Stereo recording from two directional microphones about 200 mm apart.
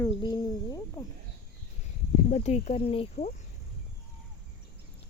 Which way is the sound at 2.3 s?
35° left (ahead or behind).